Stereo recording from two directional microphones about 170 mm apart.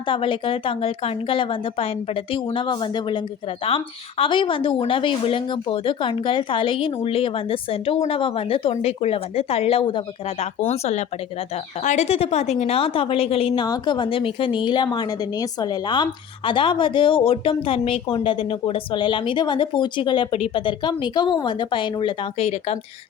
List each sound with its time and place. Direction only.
0.1 s a woman's voice: 30° left (ahead or behind)